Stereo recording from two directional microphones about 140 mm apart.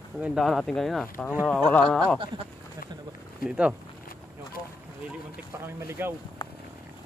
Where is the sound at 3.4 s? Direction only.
10° right (ahead or behind).